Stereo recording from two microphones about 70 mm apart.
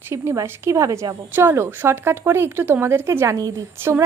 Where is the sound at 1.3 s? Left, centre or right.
Right.